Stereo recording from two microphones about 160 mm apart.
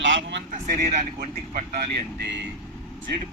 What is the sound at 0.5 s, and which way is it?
Speech, 45° right (ahead or behind).